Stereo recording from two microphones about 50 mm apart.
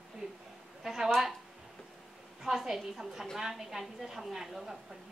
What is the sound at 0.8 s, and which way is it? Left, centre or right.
Speech, centre.